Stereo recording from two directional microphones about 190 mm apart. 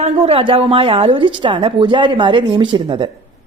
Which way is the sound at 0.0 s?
30° right (ahead or behind).